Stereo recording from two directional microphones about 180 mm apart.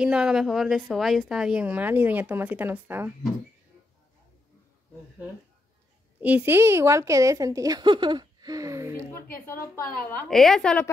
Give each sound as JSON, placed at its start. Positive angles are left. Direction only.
{"t": 0.0, "sound": "a woman's voice", "side_deg": -5}
{"t": 6.2, "sound": "a woman's voice", "side_deg": -10}
{"t": 10.2, "sound": "a woman's voice", "side_deg": 0}